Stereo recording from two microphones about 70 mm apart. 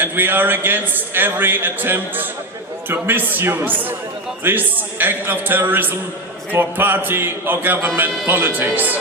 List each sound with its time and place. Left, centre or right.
0.0 s a man's voice: right